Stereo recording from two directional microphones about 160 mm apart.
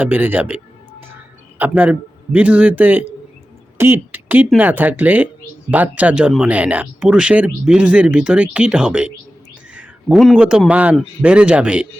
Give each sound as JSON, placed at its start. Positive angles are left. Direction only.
{"t": 0.0, "sound": "speech", "side_deg": -10}
{"t": 3.8, "sound": "a sound", "side_deg": -15}
{"t": 4.4, "sound": "speech", "side_deg": -10}